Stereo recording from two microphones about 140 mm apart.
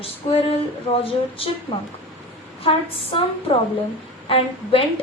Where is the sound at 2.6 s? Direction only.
40° left (ahead or behind).